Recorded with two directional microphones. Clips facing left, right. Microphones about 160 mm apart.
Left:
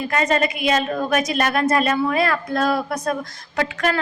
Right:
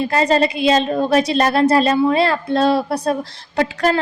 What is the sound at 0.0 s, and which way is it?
A woman's voice, 30° right (ahead or behind).